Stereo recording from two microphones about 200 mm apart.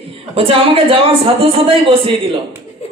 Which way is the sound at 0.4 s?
30° right (ahead or behind).